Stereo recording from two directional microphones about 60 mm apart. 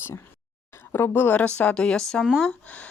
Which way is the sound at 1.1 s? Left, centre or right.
Left.